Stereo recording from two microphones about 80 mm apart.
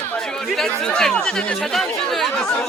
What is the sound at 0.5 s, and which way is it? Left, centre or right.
Speech, centre.